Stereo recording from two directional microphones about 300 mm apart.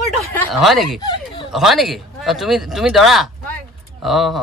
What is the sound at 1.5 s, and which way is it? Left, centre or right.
Speech, centre.